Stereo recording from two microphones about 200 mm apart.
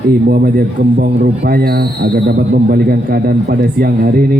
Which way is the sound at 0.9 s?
55° right (ahead or behind).